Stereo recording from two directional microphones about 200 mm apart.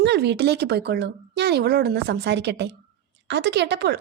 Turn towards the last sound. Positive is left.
turn(degrees=-55)  # may be behind; listen again after turning